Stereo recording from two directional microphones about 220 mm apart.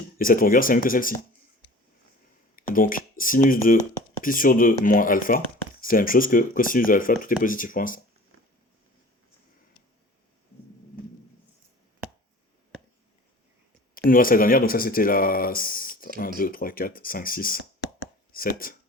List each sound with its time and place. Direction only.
0.2 s speech: 40° left (ahead or behind)
2.6 s speech: 40° left (ahead or behind)
13.9 s speech: 40° left (ahead or behind)